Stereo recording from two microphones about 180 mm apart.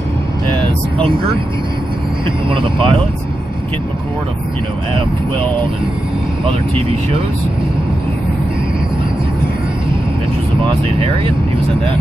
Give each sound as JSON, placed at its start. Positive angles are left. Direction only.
{"t": 2.5, "sound": "speech", "side_deg": -30}